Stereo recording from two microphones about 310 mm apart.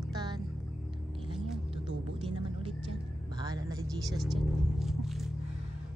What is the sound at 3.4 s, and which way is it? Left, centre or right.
Vehicle, centre.